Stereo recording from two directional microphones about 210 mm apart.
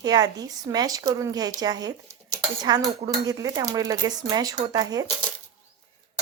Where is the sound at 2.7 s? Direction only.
20° right (ahead or behind).